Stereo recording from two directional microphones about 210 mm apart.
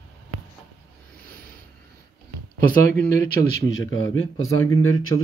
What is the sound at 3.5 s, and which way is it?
Speech, 65° left (ahead or behind).